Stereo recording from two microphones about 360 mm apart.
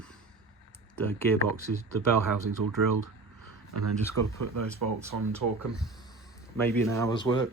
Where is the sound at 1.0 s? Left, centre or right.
Centre.